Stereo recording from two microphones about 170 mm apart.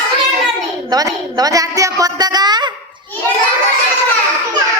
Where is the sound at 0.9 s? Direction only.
20° right (ahead or behind).